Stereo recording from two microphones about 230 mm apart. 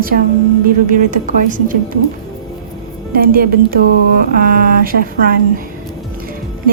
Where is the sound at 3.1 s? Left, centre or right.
Right.